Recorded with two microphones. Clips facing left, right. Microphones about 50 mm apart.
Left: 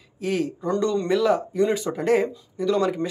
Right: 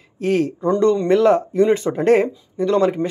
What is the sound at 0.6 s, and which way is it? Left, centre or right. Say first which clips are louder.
Speech: right 7 dB; right.